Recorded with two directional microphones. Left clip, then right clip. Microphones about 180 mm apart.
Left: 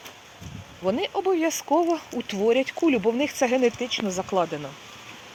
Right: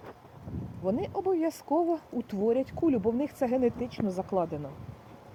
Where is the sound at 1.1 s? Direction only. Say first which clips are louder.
Left 5 dB; 50° left (ahead or behind).